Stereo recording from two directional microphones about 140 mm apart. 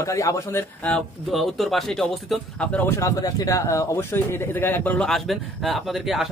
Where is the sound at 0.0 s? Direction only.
25° left (ahead or behind).